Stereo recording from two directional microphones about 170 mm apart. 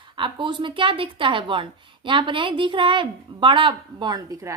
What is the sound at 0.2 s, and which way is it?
A woman's voice, 30° right (ahead or behind).